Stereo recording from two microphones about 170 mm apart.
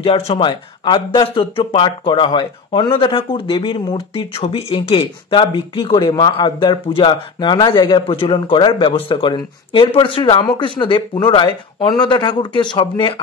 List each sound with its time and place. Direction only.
0.0 s a man's voice: 30° left (ahead or behind)